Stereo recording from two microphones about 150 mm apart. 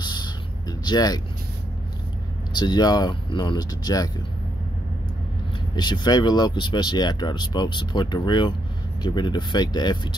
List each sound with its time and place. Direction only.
0.0 s a sound: 30° left (ahead or behind)
2.5 s speech: 30° left (ahead or behind)
5.8 s speech: 30° left (ahead or behind)